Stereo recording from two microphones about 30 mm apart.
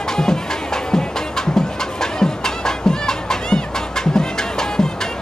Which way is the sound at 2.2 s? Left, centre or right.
Left.